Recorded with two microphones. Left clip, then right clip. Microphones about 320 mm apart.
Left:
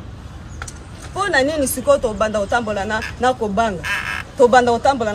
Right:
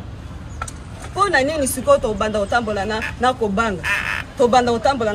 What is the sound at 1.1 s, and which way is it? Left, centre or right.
Speech, left.